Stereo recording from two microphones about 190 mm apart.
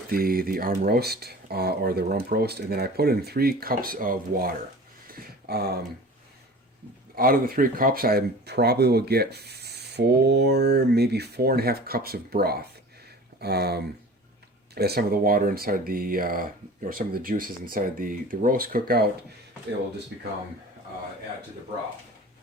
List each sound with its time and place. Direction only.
0.1 s speech: 50° right (ahead or behind)
5.0 s a sound: 55° right (ahead or behind)
7.2 s speech: 50° right (ahead or behind)